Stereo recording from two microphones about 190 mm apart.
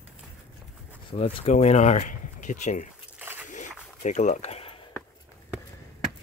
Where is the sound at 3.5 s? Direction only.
40° left (ahead or behind).